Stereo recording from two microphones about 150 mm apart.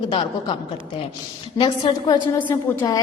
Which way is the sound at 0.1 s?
40° left (ahead or behind).